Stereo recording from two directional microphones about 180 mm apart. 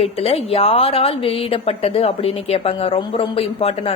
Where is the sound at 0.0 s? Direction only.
30° left (ahead or behind).